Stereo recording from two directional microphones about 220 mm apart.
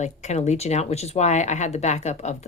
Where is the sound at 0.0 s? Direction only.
30° left (ahead or behind).